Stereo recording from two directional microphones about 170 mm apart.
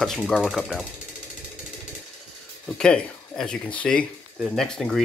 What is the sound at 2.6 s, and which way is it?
Speech, 5° left (ahead or behind).